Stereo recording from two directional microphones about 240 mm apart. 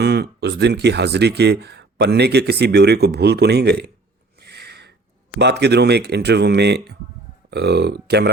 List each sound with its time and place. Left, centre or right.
0.0 s speech: right
4.4 s a sound: right
5.4 s speech: right